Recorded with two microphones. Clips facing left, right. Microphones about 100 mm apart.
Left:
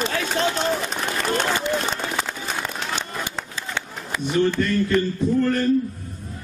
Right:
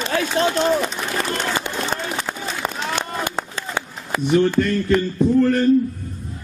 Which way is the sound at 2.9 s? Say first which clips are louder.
Right 5 dB; 60° right (ahead or behind).